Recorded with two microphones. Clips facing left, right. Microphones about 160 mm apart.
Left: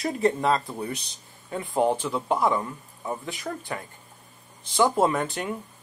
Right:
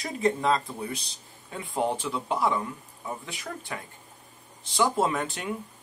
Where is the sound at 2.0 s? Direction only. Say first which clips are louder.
Left 3 dB; 45° left (ahead or behind).